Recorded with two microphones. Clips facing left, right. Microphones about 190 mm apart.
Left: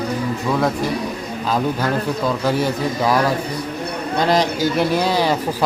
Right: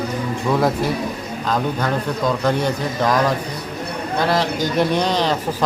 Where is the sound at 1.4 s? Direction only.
5° left (ahead or behind).